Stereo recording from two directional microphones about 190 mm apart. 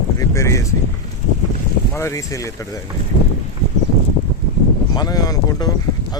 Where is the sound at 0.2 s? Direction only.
15° left (ahead or behind).